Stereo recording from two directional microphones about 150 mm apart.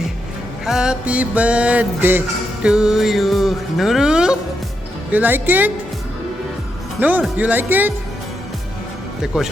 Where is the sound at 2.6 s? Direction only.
5° right (ahead or behind).